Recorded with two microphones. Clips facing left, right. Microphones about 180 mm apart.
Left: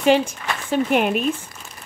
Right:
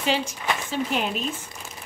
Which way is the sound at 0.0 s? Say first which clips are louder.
Left 8 dB; 55° left (ahead or behind).